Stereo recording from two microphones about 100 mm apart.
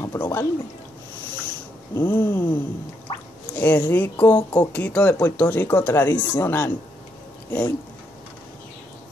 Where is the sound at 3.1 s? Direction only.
55° left (ahead or behind).